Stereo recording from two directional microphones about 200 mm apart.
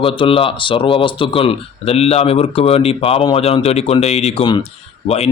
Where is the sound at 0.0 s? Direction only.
25° left (ahead or behind).